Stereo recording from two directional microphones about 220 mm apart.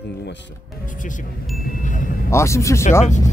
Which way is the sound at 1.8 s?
35° left (ahead or behind).